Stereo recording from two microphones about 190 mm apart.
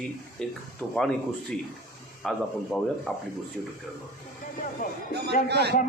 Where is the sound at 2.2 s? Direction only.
5° left (ahead or behind).